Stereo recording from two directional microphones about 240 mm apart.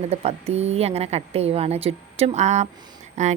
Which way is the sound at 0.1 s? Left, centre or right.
Right.